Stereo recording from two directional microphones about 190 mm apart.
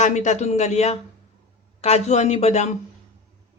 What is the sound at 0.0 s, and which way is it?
Speech, 40° left (ahead or behind).